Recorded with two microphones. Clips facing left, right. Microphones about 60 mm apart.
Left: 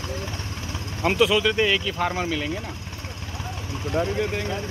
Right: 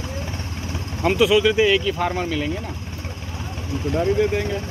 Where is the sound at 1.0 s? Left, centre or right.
Centre.